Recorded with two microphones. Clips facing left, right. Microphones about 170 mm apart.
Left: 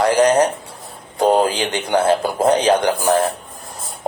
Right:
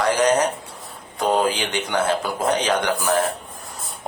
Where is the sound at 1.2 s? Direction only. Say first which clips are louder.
Left 5 dB; 30° left (ahead or behind).